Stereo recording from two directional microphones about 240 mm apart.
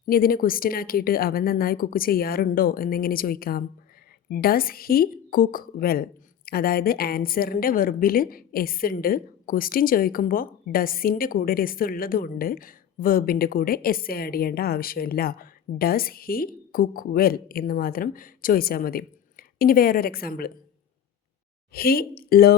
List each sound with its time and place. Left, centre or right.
0.1 s speech: left
21.7 s speech: left